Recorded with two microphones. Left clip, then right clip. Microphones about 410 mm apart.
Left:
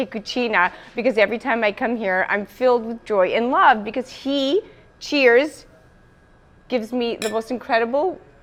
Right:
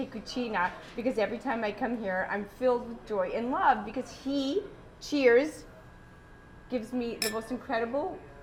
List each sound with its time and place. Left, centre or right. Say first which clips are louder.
0.1 s a woman's voice: left 12 dB; left
5.0 s speech: left 8 dB; left
6.7 s speech: left 11 dB; left